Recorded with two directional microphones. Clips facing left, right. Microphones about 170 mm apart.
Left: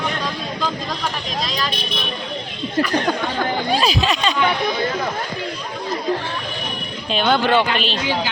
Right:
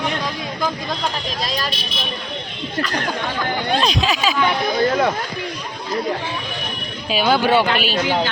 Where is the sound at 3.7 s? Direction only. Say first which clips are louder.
Right 1 dB; 5° left (ahead or behind).